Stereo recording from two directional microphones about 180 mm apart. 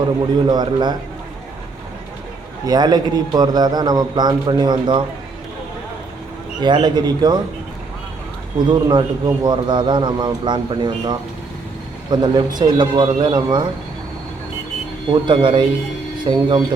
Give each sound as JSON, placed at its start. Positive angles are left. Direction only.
{"t": 0.4, "sound": "a man's voice", "side_deg": -25}
{"t": 2.6, "sound": "a man's voice", "side_deg": -25}
{"t": 6.6, "sound": "a man's voice", "side_deg": -25}
{"t": 8.5, "sound": "a man's voice", "side_deg": -25}
{"t": 15.1, "sound": "a man's voice", "side_deg": -25}